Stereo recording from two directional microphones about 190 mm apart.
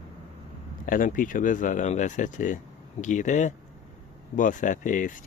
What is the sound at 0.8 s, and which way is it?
Speech, 45° left (ahead or behind).